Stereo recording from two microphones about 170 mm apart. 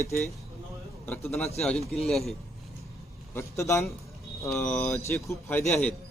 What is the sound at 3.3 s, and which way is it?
Speech, 15° left (ahead or behind).